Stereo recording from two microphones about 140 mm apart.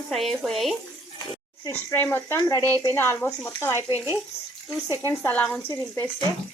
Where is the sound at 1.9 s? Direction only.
15° left (ahead or behind).